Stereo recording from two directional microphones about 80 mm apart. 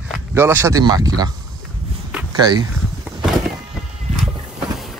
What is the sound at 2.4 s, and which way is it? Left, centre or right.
Speech, right.